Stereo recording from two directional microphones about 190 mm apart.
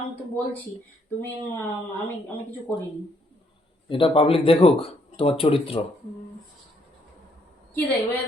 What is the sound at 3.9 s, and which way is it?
Speech, 25° left (ahead or behind).